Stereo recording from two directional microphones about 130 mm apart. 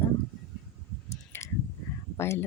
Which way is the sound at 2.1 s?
20° left (ahead or behind).